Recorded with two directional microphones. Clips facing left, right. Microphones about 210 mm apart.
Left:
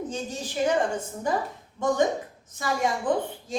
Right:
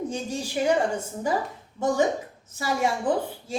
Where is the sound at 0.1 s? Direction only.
10° right (ahead or behind).